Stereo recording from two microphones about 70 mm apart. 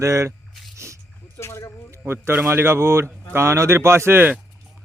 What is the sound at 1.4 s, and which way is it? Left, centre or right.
Speech, left.